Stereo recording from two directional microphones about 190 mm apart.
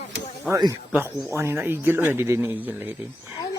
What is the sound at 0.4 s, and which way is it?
Speech, 15° right (ahead or behind).